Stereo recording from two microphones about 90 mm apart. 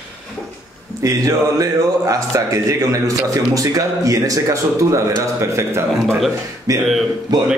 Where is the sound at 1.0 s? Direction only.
35° right (ahead or behind).